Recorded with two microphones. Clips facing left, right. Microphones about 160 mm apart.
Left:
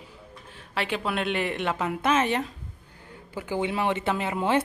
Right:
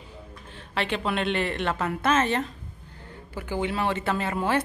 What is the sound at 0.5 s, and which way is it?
Speech, 10° left (ahead or behind).